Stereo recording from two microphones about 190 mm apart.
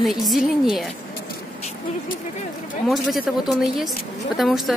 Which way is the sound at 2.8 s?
Centre (ahead or behind).